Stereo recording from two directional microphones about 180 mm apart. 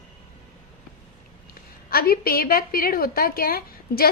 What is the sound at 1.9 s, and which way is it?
A woman's voice, 55° left (ahead or behind).